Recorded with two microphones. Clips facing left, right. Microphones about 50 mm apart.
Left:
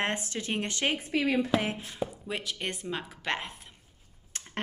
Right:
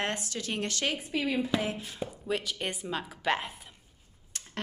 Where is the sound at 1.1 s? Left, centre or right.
Left.